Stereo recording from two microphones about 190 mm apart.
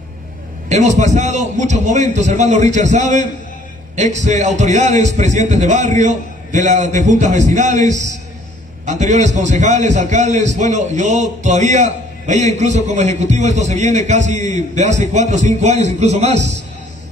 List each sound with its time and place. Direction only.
0.7 s a man's voice: 35° right (ahead or behind)